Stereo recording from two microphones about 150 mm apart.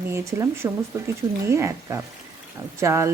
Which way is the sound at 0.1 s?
20° right (ahead or behind).